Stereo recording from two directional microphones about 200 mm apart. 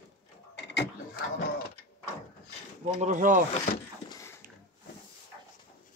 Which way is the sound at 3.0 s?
40° right (ahead or behind).